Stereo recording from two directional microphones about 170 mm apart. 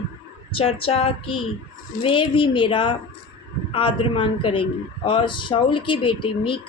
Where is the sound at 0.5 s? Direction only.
35° left (ahead or behind).